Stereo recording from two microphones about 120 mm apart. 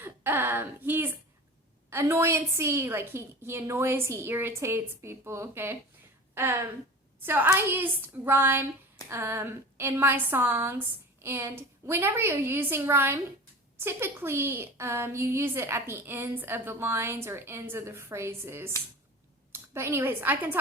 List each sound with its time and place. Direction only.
0.0 s a woman's voice: 15° right (ahead or behind)
19.7 s speech: 20° right (ahead or behind)